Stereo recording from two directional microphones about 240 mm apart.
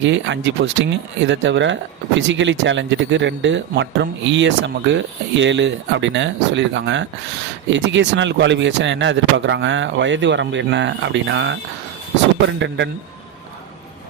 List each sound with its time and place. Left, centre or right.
0.0 s speech: right
12.5 s speech: right